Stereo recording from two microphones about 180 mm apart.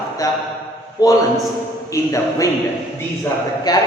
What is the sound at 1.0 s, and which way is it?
A man's voice, 20° left (ahead or behind).